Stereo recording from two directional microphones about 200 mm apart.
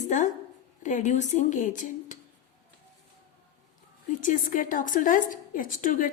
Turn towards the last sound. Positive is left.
turn(degrees=40)  # may be behind; listen again after turning